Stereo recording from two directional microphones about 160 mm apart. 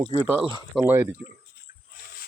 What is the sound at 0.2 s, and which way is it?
Speech, 10° right (ahead or behind).